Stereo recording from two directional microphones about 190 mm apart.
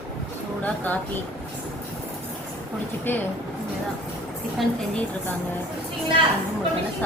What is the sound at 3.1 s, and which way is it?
Speech, 10° left (ahead or behind).